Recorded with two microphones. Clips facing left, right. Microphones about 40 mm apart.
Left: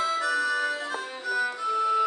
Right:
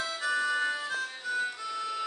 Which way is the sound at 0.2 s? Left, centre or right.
Centre.